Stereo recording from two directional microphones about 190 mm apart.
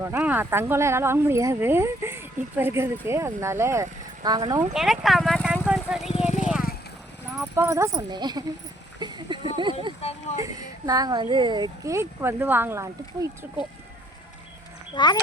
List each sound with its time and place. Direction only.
0.0 s speech: 10° right (ahead or behind)
4.7 s speech: centre (ahead or behind)
6.1 s horse: 35° left (ahead or behind)
7.3 s speech: 10° right (ahead or behind)
9.0 s a sound: 20° right (ahead or behind)
10.0 s speech: 30° left (ahead or behind)
10.3 s speech: 20° right (ahead or behind)
14.9 s speech: 25° left (ahead or behind)